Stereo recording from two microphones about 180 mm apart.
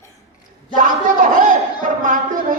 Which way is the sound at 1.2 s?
45° right (ahead or behind).